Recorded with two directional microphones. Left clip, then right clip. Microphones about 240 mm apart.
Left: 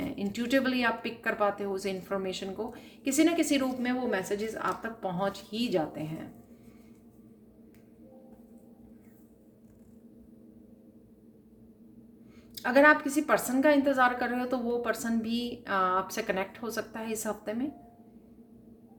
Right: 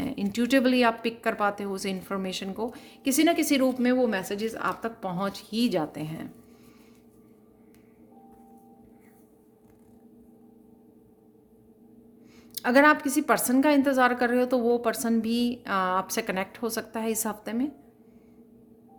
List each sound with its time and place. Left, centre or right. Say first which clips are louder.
0.0 s speech: right 5 dB; right
12.5 s speech: right 2 dB; right